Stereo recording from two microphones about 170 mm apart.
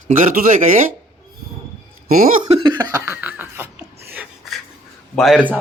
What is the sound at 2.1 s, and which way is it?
Speech, 45° right (ahead or behind).